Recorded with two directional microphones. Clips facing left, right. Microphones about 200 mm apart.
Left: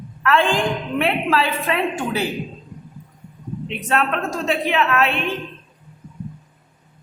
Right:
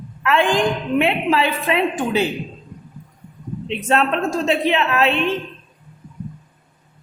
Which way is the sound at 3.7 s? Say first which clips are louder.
Right 3 dB; 25° right (ahead or behind).